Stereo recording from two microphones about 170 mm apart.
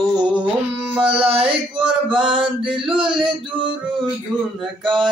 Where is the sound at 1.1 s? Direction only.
35° right (ahead or behind).